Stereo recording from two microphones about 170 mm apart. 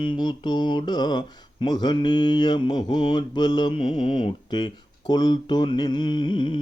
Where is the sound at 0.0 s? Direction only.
25° left (ahead or behind).